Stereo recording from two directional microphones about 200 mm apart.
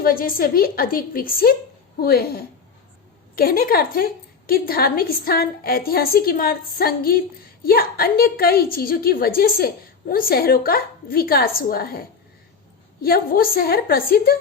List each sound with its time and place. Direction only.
0.0 s a woman's voice: 45° left (ahead or behind)